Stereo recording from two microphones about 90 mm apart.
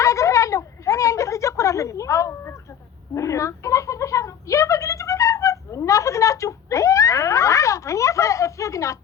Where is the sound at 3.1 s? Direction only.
35° left (ahead or behind).